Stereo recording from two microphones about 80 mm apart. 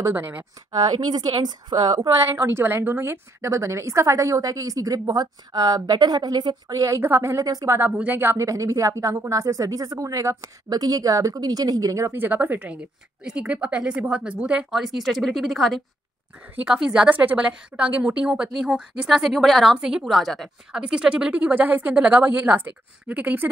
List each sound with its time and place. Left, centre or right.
0.0 s speech: right
0.7 s a woman's voice: right
2.2 s a woman's voice: right
7.0 s a woman's voice: right
8.4 s a woman's voice: right
12.1 s speech: right
13.2 s speech: centre
14.7 s a woman's voice: centre
17.1 s a woman's voice: centre
20.7 s speech: centre